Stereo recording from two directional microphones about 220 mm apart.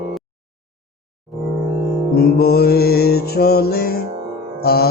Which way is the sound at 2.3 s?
45° left (ahead or behind).